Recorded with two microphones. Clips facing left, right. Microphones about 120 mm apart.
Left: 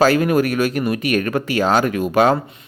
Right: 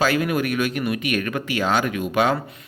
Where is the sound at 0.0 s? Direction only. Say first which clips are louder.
Left 6 dB; 40° left (ahead or behind).